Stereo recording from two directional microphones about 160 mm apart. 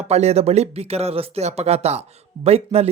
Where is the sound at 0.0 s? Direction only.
40° right (ahead or behind).